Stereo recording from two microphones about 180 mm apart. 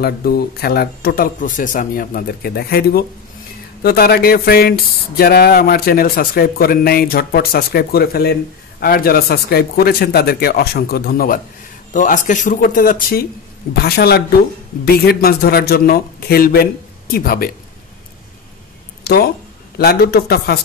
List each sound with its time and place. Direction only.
0.0 s speech: 60° left (ahead or behind)
13.7 s speech: 60° left (ahead or behind)
19.0 s speech: 60° left (ahead or behind)